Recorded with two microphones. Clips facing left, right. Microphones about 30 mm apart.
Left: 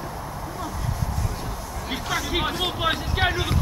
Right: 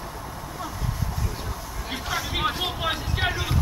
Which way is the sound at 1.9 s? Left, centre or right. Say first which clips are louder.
Left 3 dB; centre.